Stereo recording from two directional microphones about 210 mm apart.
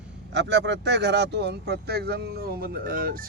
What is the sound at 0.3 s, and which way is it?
Speech, 55° right (ahead or behind).